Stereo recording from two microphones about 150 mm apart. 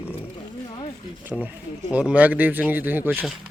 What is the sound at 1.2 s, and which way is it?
Speech, 10° right (ahead or behind).